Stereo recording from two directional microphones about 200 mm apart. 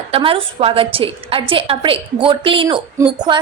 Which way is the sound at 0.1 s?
25° right (ahead or behind).